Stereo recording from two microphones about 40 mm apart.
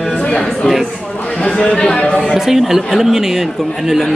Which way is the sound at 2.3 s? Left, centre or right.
Centre.